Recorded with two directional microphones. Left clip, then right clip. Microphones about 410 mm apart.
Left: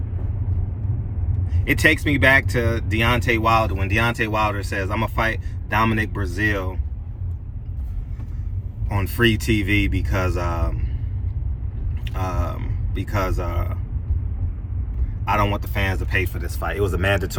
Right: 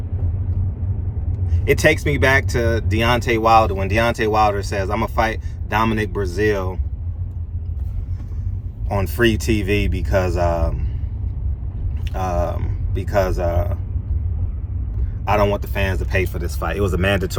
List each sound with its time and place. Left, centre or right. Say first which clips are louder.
1.6 s speech: right 2 dB; centre
6.4 s speech: right 3 dB; right
8.9 s speech: right 2 dB; centre
9.5 s speech: right 1 dB; right
12.0 s speech: right 6 dB; right
12.5 s a sound: right 3 dB; centre
13.0 s speech: right 6 dB; right
15.2 s speech: right 3 dB; right
15.6 s speech: right 2 dB; centre